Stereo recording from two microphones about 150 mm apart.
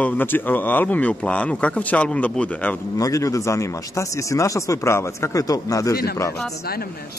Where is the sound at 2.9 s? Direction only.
20° left (ahead or behind).